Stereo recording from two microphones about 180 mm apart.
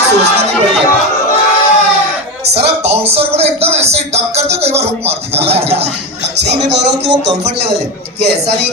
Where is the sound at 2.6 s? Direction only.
35° right (ahead or behind).